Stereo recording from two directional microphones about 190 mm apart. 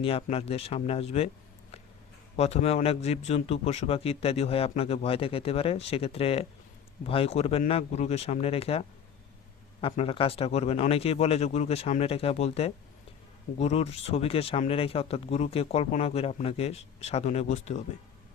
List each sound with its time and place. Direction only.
0.0 s speech: 30° left (ahead or behind)
2.3 s speech: 35° left (ahead or behind)
9.9 s speech: 30° left (ahead or behind)